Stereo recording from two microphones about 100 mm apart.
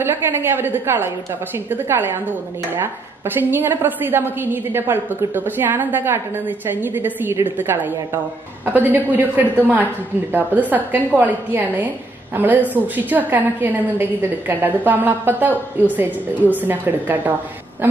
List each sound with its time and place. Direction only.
0.0 s a woman's voice: 25° right (ahead or behind)